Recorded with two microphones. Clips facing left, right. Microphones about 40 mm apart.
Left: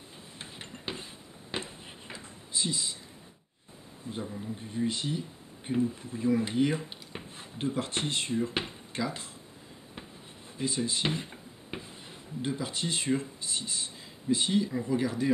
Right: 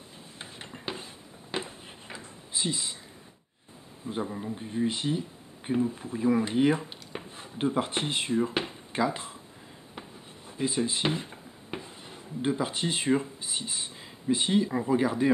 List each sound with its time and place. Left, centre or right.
0.8 s a sound: centre
2.5 s speech: centre
4.2 s speech: right
4.6 s speech: centre
7.1 s a sound: centre
7.5 s speech: centre
10.6 s speech: centre
11.1 s a sound: centre
12.4 s speech: centre